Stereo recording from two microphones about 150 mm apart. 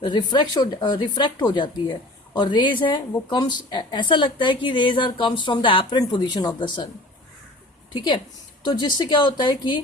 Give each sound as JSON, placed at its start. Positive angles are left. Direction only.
{"t": 0.0, "sound": "speech", "side_deg": 30}
{"t": 7.9, "sound": "speech", "side_deg": 30}